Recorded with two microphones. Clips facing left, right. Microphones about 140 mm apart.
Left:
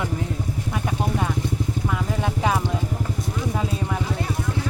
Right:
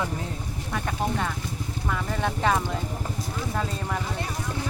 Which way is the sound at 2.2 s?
5° left (ahead or behind).